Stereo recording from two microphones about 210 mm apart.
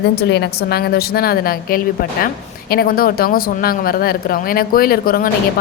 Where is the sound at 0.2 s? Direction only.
55° left (ahead or behind).